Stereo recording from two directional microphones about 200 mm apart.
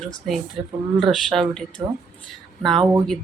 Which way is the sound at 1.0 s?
Centre (ahead or behind).